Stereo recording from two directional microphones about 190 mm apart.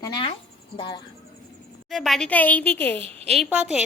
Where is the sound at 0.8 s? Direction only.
25° left (ahead or behind).